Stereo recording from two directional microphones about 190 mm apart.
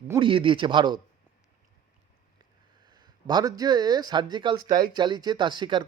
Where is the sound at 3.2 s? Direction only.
20° right (ahead or behind).